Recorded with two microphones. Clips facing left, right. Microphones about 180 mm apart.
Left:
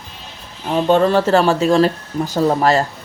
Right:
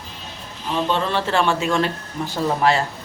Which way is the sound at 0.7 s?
45° left (ahead or behind).